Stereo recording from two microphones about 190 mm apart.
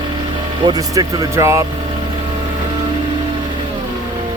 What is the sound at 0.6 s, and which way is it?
Speech, 20° right (ahead or behind).